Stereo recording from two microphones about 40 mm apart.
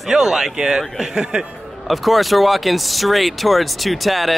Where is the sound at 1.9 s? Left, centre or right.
Centre.